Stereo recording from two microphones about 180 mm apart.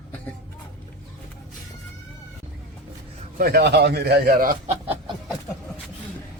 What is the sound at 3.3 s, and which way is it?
A man's voice, 60° right (ahead or behind).